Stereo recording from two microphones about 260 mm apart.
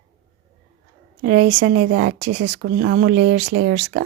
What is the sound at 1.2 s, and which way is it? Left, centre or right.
Speech, right.